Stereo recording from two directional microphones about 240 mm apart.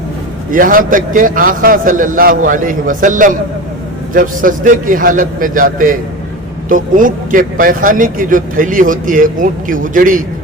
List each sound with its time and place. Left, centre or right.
0.5 s a man's voice: right